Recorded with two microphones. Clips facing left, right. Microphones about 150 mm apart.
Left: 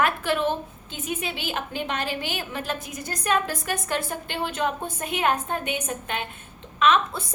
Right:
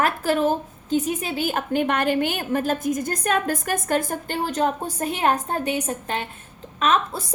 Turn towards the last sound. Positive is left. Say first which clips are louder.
# even
turn(degrees=-40)  # may be behind; listen again after turning